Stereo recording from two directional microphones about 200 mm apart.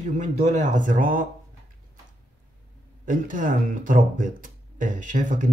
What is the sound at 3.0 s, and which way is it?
Speech, 40° right (ahead or behind).